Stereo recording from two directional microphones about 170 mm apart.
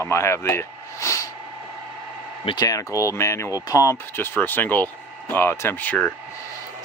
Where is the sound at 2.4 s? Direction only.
25° left (ahead or behind); by 6.1 s 10° left (ahead or behind).